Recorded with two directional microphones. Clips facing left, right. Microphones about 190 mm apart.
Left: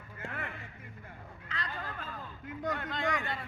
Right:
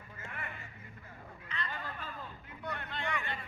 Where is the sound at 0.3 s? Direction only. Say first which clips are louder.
Left 4 dB; 90° left.